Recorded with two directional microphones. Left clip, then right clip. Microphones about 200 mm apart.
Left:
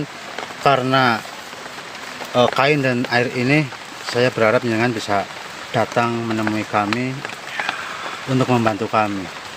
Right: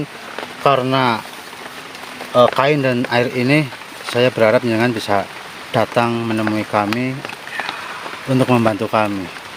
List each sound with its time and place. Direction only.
0.6 s speech: 20° right (ahead or behind)
2.3 s speech: 15° right (ahead or behind)
8.4 s speech: 25° right (ahead or behind)